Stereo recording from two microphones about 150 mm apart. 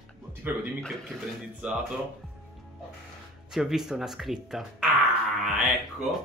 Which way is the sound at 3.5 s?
Centre (ahead or behind).